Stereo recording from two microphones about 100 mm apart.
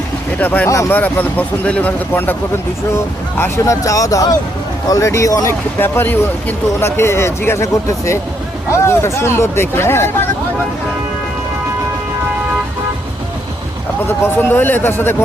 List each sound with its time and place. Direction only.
0.3 s speech: 15° left (ahead or behind)
3.6 s speech: 35° left (ahead or behind)
5.8 s speech: 20° left (ahead or behind)
14.1 s speech: 20° left (ahead or behind)